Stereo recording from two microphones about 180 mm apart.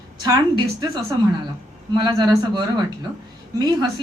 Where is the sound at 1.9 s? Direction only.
25° right (ahead or behind).